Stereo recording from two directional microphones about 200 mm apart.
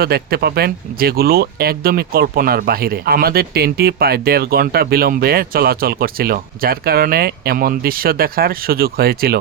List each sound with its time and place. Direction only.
0.0 s speech: 50° right (ahead or behind)